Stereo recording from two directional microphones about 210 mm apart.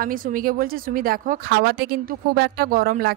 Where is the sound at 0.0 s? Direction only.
40° right (ahead or behind).